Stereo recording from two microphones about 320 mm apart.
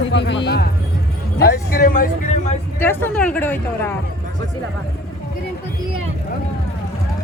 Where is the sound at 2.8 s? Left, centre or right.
Centre.